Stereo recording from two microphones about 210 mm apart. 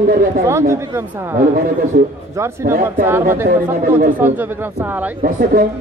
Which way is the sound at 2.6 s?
40° right (ahead or behind).